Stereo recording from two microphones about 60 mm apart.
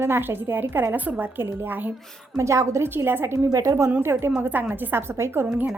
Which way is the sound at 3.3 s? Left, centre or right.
Right.